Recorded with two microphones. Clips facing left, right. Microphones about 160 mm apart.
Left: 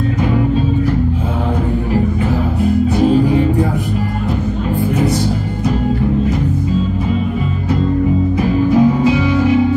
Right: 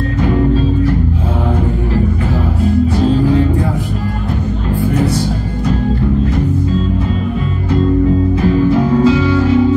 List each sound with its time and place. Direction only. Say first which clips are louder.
9.0 s music: right 2 dB; 15° left (ahead or behind)